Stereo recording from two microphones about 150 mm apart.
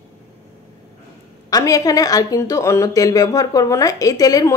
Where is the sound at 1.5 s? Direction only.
25° left (ahead or behind).